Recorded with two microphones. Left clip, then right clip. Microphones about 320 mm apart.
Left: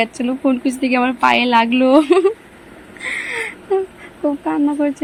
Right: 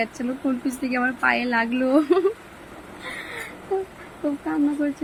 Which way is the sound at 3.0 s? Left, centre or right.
Centre.